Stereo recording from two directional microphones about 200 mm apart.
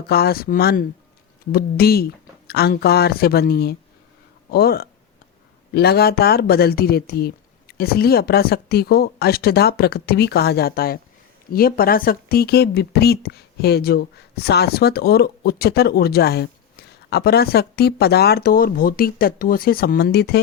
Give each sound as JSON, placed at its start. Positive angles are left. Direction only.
{"t": 0.1, "sound": "speech", "side_deg": 50}